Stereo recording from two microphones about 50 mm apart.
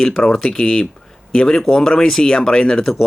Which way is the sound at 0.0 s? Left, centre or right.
Centre.